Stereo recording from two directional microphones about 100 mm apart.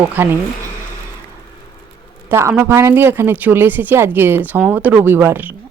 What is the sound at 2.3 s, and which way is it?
Speech, 25° right (ahead or behind).